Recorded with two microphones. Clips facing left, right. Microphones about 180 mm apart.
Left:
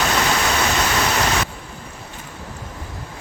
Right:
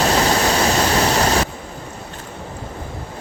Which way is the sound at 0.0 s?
35° right (ahead or behind).